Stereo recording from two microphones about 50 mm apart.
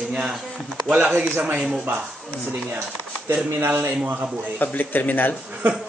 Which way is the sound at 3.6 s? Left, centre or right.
Right.